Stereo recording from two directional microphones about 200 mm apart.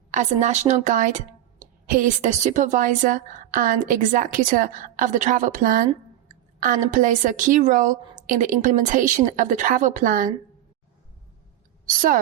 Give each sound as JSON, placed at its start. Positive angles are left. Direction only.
{"t": 0.1, "sound": "a woman's voice", "side_deg": -35}
{"t": 11.9, "sound": "a woman's voice", "side_deg": -45}